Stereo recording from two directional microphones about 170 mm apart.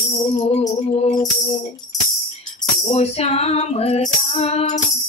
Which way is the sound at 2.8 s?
35° left (ahead or behind).